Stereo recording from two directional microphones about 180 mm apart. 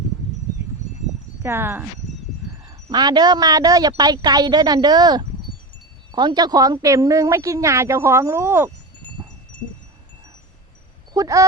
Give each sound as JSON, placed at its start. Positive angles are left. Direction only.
{"t": 1.4, "sound": "speech", "side_deg": -10}
{"t": 2.6, "sound": "a woman's voice", "side_deg": -20}
{"t": 9.2, "sound": "wind chime", "side_deg": -15}
{"t": 11.1, "sound": "speech", "side_deg": -20}